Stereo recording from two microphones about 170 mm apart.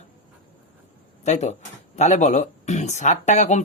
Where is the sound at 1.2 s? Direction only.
40° left (ahead or behind).